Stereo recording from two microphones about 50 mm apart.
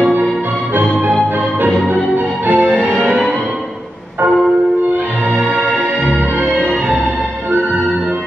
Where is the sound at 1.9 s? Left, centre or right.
Right.